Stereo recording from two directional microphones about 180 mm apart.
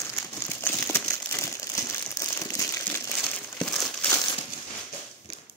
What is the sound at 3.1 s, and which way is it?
Crumpling, 5° left (ahead or behind).